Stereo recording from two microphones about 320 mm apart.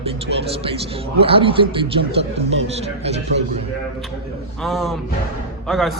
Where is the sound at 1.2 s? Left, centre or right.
Centre.